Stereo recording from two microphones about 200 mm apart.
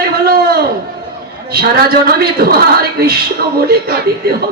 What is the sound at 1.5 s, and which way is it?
A woman's voice, 50° right (ahead or behind).